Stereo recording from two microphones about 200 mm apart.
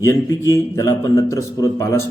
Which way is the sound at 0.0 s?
15° left (ahead or behind).